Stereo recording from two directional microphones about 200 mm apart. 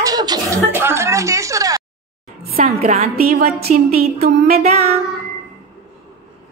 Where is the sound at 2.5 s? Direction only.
40° right (ahead or behind).